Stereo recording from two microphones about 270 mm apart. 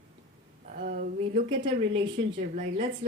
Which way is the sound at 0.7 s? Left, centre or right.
Right.